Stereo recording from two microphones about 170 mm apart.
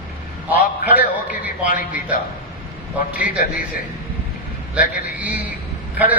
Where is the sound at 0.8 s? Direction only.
10° right (ahead or behind).